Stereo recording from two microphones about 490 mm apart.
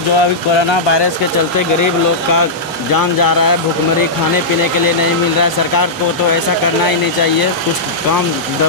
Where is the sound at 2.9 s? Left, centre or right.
Left.